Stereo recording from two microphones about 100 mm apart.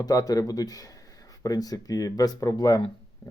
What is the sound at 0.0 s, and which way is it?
Speech, 40° left (ahead or behind).